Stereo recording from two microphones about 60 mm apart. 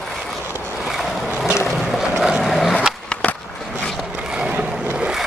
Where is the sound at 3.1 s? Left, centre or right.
Left.